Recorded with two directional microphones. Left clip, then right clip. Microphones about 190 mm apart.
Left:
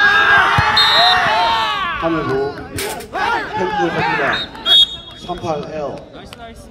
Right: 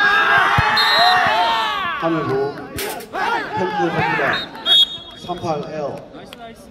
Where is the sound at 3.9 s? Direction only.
Centre (ahead or behind).